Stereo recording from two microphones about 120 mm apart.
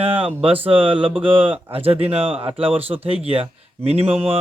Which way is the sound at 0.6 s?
50° right (ahead or behind).